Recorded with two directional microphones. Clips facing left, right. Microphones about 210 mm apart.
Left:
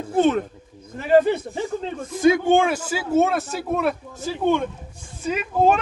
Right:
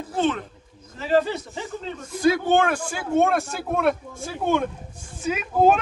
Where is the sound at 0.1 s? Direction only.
45° left (ahead or behind).